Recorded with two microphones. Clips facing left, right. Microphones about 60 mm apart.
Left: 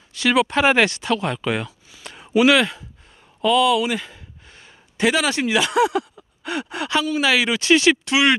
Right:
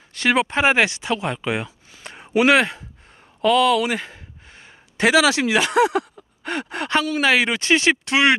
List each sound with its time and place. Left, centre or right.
0.1 s speech: right
0.5 s speech: centre
2.0 s speech: right
3.4 s speech: right
4.9 s speech: right
5.5 s a man's voice: right